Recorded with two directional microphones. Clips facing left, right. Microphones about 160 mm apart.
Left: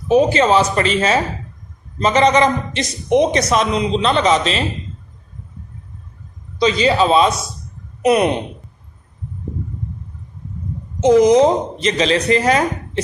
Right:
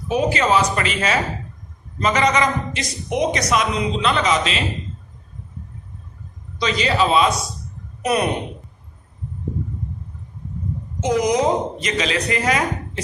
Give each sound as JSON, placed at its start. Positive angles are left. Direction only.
{"t": 0.1, "sound": "a woman's voice", "side_deg": 30}
{"t": 6.6, "sound": "a woman's voice", "side_deg": 30}
{"t": 11.0, "sound": "a woman's voice", "side_deg": 25}